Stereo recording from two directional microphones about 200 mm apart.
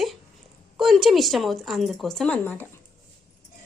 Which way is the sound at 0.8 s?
Centre (ahead or behind).